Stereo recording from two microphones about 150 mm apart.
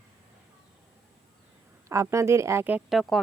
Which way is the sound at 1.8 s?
20° right (ahead or behind).